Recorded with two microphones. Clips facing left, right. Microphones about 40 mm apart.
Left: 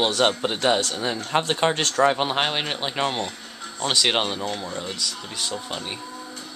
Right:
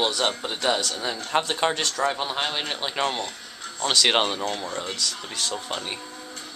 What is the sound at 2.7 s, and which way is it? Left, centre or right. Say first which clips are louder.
Speech: left 1 dB; centre.